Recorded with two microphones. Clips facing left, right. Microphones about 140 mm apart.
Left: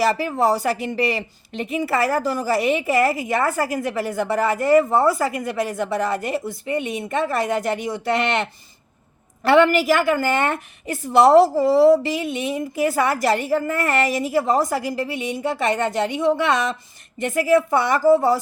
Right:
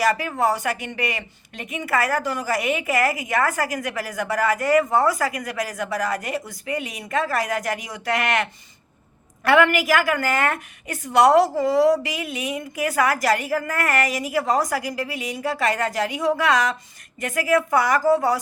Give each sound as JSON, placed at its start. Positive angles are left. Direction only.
{"t": 0.0, "sound": "speech", "side_deg": 30}